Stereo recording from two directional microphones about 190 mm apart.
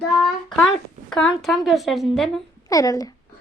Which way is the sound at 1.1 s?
5° left (ahead or behind).